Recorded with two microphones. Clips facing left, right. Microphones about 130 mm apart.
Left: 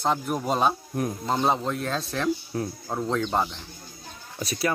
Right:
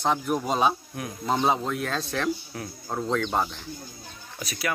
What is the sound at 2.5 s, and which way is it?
Speech, 30° left (ahead or behind).